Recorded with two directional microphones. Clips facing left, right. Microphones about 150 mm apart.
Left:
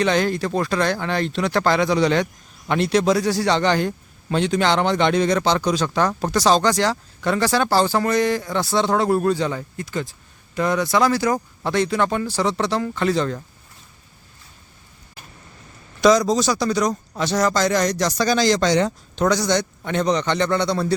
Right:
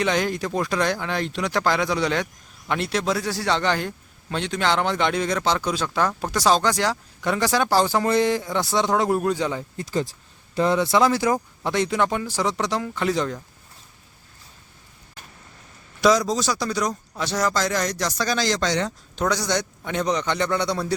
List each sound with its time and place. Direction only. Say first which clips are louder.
0.0 s a man's voice: left 3 dB; 10° right (ahead or behind)
9.7 s speech: right 2 dB; 30° right (ahead or behind); by 13.3 s 10° right (ahead or behind)
16.0 s a man's voice: left 3 dB; 5° right (ahead or behind)